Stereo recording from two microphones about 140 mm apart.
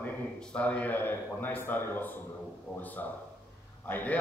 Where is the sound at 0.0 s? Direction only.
10° left (ahead or behind).